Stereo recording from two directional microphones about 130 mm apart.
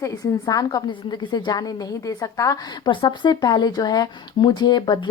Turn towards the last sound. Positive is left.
turn(degrees=35)  # may be behind; listen again after turning